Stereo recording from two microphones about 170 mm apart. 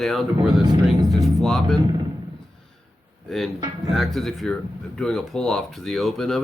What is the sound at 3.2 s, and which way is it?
Speech, centre (ahead or behind).